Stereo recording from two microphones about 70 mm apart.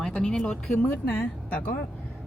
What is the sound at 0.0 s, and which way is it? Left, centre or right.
Speech, centre.